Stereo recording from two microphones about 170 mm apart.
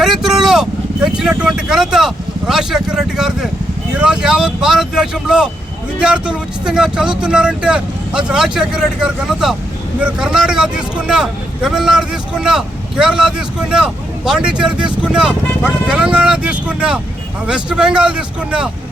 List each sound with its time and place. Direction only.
0.0 s a man's voice: centre (ahead or behind)